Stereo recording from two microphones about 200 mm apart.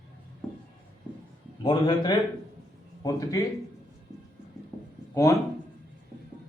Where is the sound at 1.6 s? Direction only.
20° left (ahead or behind).